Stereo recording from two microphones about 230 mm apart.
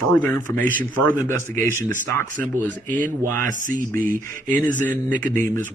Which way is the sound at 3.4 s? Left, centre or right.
Right.